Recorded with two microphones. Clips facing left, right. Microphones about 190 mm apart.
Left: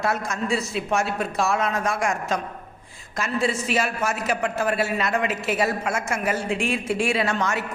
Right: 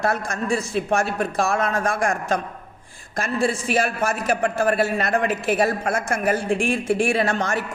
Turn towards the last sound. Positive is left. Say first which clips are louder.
# right 3 dB
turn(degrees=-50)  # may be behind; listen again after turning